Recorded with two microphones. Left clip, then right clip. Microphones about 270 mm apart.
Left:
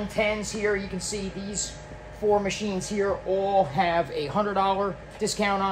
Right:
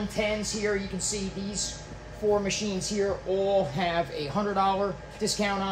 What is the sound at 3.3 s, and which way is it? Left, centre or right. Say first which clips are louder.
Speech: left 2 dB; centre.